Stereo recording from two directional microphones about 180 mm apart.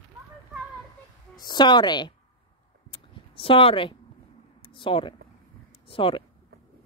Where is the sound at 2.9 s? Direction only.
30° left (ahead or behind).